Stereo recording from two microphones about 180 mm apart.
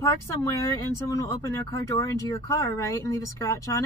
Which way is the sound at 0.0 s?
15° left (ahead or behind).